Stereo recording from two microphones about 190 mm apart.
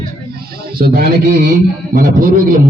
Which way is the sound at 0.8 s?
50° right (ahead or behind).